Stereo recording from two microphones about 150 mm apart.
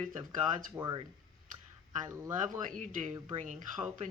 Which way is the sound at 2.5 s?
60° right (ahead or behind).